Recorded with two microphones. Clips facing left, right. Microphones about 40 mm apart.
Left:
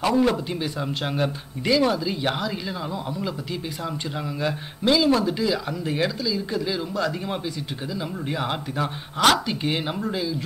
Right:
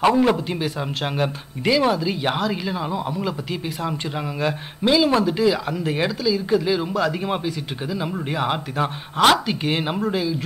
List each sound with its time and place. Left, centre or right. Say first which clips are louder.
0.2 s speech: right 3 dB; centre
4.4 s speech: right 4 dB; centre